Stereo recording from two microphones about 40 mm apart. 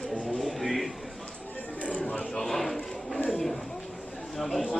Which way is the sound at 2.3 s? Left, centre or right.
Centre.